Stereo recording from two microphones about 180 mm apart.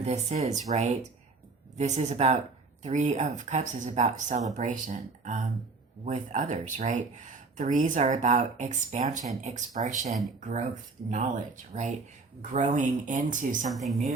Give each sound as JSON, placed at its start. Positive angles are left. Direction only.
{"t": 0.0, "sound": "speech", "side_deg": -40}
{"t": 13.7, "sound": "speech", "side_deg": 0}